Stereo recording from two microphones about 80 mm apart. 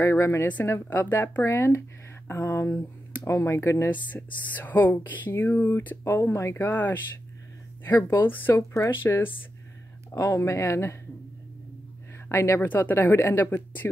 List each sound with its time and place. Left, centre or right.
0.0 s speech: left
0.8 s speech: left
3.9 s speech: left
8.5 s speech: left
9.0 s speech: left
10.1 s speech: left
12.3 s speech: left